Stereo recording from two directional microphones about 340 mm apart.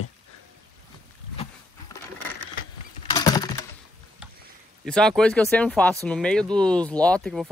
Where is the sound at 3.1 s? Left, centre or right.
Centre.